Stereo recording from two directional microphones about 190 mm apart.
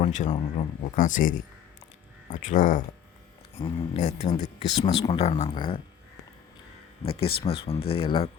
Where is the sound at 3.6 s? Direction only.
30° left (ahead or behind).